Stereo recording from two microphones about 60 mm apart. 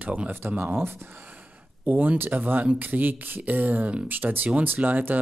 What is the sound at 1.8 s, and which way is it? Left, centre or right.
Speech, right.